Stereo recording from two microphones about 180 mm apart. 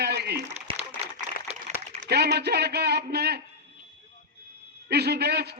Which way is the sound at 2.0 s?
65° right (ahead or behind).